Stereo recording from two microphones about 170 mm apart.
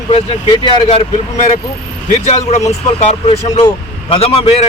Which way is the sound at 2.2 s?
40° left (ahead or behind).